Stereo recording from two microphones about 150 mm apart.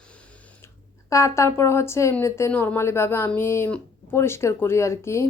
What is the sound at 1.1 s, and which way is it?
A woman's voice, 20° left (ahead or behind).